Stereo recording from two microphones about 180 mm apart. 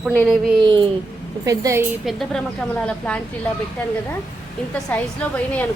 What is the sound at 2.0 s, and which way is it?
A woman's voice, 5° left (ahead or behind).